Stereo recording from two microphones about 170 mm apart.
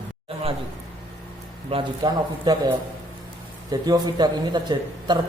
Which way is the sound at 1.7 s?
30° right (ahead or behind).